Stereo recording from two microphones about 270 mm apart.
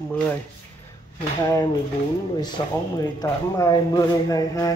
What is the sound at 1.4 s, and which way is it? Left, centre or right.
Speech, centre.